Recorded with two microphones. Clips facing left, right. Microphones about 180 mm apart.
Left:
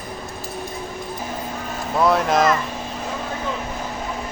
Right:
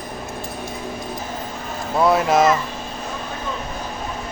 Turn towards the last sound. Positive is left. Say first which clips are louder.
# right 2 dB
turn(degrees=-5)  # may be behind; listen again after turning